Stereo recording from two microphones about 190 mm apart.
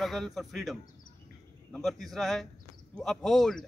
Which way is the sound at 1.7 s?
Centre (ahead or behind).